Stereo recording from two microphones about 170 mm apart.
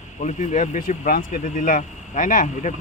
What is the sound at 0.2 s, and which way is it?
Speech, 45° left (ahead or behind).